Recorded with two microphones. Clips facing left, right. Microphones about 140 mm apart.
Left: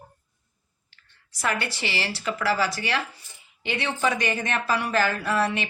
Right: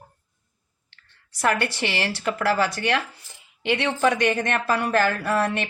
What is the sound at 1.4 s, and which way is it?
Speech, 60° right (ahead or behind).